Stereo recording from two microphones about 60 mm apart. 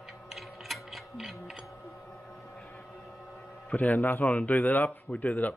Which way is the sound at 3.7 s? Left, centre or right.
Left.